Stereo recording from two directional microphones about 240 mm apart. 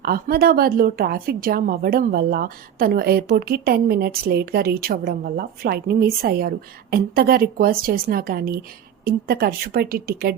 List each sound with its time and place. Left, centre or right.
0.0 s speech: right